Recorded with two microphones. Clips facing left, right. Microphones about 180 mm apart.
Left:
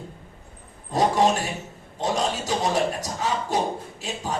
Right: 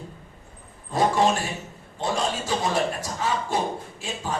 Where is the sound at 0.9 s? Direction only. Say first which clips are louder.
Left 1 dB; 40° left (ahead or behind).